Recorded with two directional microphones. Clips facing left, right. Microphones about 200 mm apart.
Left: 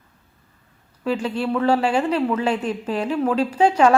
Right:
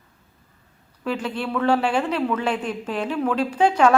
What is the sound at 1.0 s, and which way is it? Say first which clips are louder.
Speech: left 3 dB; 10° left (ahead or behind).